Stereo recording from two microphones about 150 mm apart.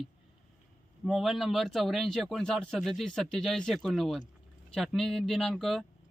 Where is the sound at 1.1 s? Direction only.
Centre (ahead or behind).